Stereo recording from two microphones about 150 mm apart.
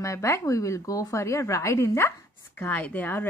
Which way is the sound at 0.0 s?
20° left (ahead or behind).